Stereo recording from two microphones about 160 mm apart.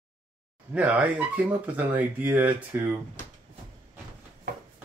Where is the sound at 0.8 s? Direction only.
10° right (ahead or behind).